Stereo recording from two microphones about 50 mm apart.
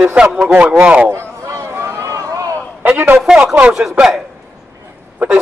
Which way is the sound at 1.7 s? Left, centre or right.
Right.